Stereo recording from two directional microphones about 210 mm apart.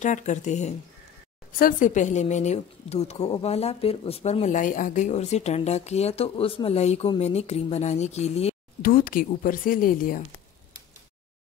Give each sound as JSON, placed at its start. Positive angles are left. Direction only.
{"t": 0.0, "sound": "a woman's voice", "side_deg": 35}
{"t": 8.8, "sound": "speech", "side_deg": 45}